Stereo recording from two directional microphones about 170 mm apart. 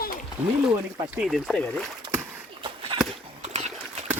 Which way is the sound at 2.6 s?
30° right (ahead or behind).